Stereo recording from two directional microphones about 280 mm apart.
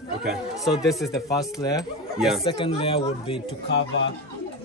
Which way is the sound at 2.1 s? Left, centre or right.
Centre.